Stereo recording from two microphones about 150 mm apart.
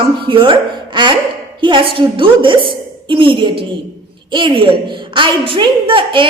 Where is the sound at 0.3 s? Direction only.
35° right (ahead or behind).